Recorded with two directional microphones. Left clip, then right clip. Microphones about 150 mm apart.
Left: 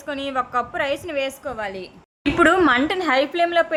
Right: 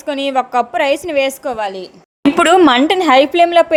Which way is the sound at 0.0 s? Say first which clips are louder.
Right 8 dB; 30° right (ahead or behind).